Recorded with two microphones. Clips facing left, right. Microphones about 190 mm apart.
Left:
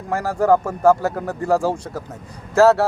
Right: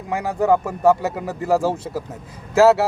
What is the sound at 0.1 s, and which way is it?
Speech, 20° right (ahead or behind).